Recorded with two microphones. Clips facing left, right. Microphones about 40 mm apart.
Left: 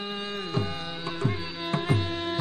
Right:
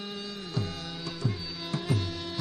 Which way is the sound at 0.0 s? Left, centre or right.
Left.